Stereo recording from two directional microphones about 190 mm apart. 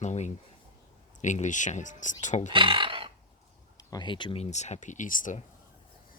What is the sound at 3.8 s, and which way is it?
Speech, 20° left (ahead or behind).